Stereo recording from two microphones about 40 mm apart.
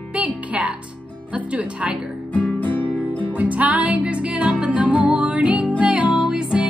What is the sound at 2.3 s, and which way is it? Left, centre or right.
Music, left.